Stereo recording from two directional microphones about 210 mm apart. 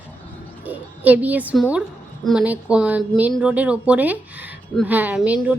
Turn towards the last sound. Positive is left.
turn(degrees=-5)  # may be behind; listen again after turning